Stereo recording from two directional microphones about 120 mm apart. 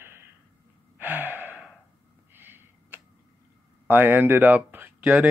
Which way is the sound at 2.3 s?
15° right (ahead or behind).